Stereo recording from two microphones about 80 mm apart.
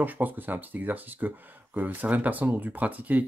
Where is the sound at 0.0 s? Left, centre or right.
Right.